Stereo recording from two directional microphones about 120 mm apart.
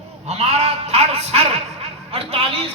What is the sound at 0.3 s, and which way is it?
Speech, 65° right (ahead or behind).